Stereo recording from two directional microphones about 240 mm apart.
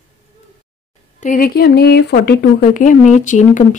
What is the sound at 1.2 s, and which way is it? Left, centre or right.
A woman's voice, left.